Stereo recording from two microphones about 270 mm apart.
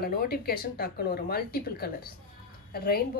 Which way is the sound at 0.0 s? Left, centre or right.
Left.